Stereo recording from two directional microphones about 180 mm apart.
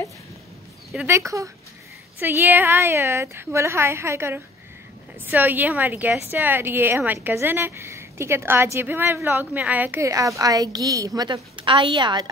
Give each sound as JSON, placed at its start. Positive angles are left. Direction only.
{"t": 0.9, "sound": "a woman's voice", "side_deg": -15}